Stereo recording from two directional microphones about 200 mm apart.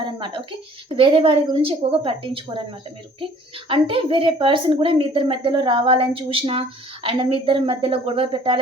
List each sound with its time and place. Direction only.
0.0 s a sound: 25° right (ahead or behind)
0.9 s a woman's voice: 25° right (ahead or behind)
3.7 s a woman's voice: 25° right (ahead or behind)